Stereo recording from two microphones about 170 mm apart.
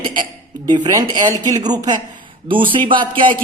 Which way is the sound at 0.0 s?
30° right (ahead or behind).